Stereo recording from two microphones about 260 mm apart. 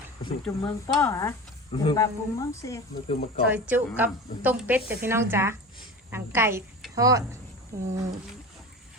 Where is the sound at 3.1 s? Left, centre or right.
Left.